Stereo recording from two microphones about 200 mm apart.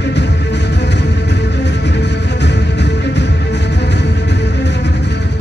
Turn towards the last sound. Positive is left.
turn(degrees=60)  # may be behind; listen again after turning